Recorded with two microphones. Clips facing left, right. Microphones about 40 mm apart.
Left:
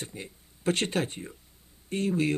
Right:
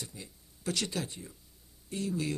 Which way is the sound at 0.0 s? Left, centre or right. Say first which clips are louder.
Left 6 dB; left.